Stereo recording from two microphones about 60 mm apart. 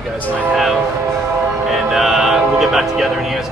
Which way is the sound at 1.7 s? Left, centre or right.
Centre.